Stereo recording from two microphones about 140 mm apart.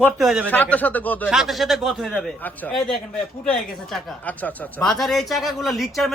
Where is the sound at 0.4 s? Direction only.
10° left (ahead or behind).